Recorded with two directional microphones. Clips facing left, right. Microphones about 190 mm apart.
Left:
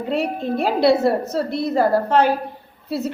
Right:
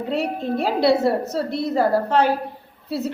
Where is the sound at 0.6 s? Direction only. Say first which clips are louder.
Left 2 dB; 50° left (ahead or behind).